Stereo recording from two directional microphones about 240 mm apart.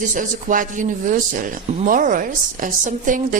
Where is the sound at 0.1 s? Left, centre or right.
Right.